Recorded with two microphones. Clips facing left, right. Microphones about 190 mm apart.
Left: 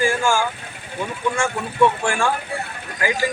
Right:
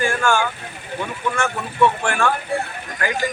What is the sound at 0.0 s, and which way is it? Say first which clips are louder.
Speech: even; 10° left (ahead or behind).